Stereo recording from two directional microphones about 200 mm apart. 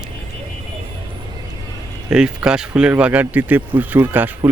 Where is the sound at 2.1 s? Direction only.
5° right (ahead or behind).